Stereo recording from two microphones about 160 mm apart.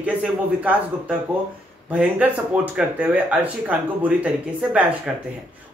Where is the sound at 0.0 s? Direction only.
10° right (ahead or behind).